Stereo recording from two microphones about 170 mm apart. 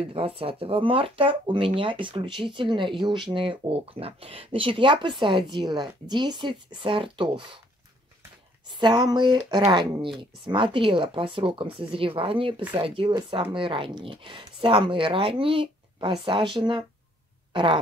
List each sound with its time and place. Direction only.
0.0 s speech: 35° right (ahead or behind)
8.7 s speech: 25° right (ahead or behind)
17.5 s fart: 30° right (ahead or behind)